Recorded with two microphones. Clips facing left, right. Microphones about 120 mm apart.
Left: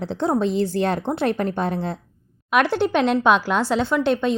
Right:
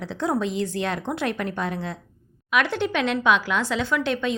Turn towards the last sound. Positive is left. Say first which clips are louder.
# left 4 dB
turn(degrees=35)  # may be behind; listen again after turning